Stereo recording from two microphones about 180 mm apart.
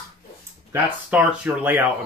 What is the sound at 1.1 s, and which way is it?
Speech, 10° right (ahead or behind).